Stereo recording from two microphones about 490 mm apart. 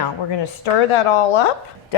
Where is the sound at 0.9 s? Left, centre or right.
Left.